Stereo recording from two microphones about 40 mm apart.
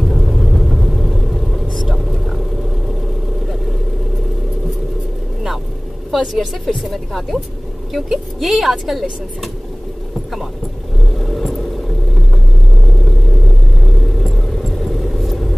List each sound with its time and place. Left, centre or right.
0.1 s vehicle: centre
6.1 s a woman's voice: centre
11.1 s vehicle: centre
14.2 s vehicle: centre